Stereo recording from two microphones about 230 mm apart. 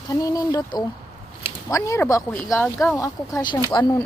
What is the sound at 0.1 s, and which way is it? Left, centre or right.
Speech, centre.